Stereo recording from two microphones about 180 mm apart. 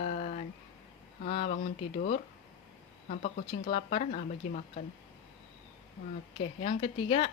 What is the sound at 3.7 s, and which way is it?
Speech, 35° left (ahead or behind).